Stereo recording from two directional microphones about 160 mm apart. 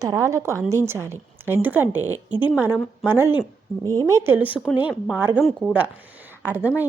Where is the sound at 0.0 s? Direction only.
20° right (ahead or behind).